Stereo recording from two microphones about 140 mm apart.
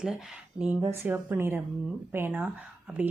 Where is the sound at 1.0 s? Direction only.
15° right (ahead or behind).